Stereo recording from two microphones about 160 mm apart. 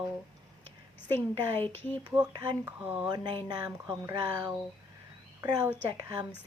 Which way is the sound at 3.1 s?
25° right (ahead or behind).